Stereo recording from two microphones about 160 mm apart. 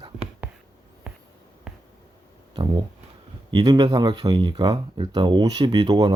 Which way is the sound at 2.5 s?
25° right (ahead or behind).